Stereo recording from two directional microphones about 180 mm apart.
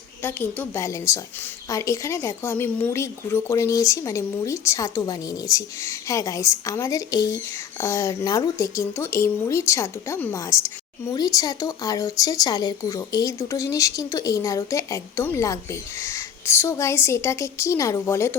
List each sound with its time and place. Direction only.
0.2 s speech: 10° left (ahead or behind)